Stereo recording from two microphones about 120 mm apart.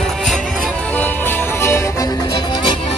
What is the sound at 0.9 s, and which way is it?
Music, 15° left (ahead or behind).